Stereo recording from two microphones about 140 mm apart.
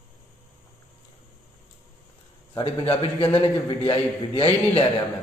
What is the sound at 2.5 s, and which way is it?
A man's voice, 45° left (ahead or behind).